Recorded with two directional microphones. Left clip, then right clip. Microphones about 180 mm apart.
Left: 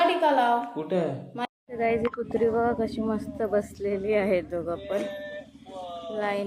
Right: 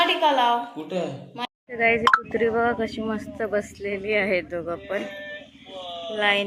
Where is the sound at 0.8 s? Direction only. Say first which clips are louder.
Left 2 dB; 50° left (ahead or behind).